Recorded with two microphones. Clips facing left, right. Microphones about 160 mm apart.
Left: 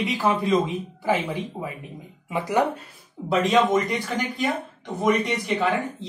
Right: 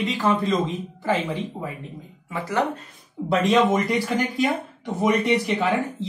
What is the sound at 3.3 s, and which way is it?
Speech, centre (ahead or behind).